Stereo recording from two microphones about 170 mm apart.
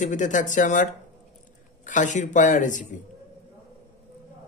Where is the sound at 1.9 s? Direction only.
45° left (ahead or behind).